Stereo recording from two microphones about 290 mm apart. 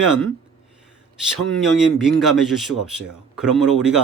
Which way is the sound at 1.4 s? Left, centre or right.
Centre.